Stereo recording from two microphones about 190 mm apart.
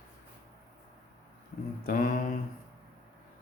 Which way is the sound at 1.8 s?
45° left (ahead or behind).